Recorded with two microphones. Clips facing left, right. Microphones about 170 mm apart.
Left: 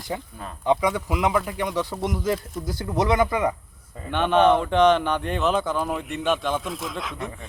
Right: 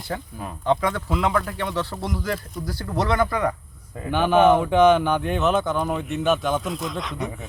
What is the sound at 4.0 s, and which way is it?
Speech, 5° right (ahead or behind).